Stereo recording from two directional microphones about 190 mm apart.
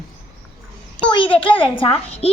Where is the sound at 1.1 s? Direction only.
25° left (ahead or behind).